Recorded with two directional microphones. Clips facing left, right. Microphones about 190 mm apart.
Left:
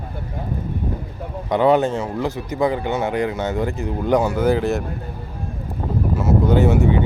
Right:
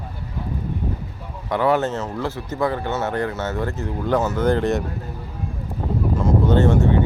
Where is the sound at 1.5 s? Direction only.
20° left (ahead or behind); by 4.8 s 5° left (ahead or behind).